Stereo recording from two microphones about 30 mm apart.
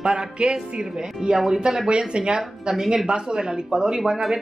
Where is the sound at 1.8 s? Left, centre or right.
Right.